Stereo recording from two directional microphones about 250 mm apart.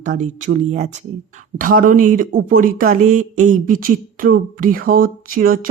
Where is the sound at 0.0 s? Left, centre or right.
Right.